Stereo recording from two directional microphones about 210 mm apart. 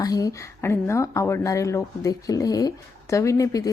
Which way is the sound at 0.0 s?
15° left (ahead or behind).